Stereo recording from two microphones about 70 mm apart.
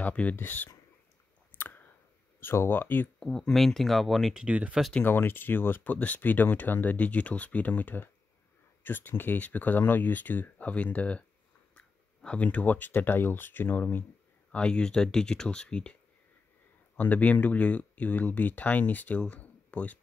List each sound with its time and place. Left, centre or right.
0.0 s speech: left
1.5 s clicking: left
2.4 s speech: left
3.2 s speech: centre
4.3 s speech: centre
5.0 s speech: left
14.5 s speech: centre